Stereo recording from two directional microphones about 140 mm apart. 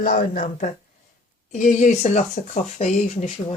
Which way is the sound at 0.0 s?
85° left.